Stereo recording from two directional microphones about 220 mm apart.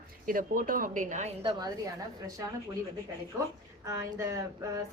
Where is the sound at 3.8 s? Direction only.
15° right (ahead or behind).